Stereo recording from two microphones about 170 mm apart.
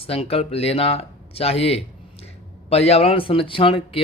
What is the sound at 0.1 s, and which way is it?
Speech, 35° left (ahead or behind).